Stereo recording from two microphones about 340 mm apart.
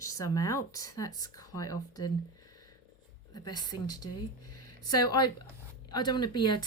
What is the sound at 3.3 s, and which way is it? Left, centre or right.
Speech, centre.